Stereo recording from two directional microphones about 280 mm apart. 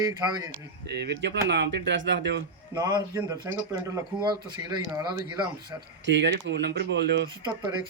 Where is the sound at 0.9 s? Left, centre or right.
Right.